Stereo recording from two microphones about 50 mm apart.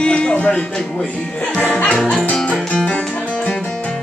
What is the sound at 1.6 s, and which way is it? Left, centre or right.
Music, left.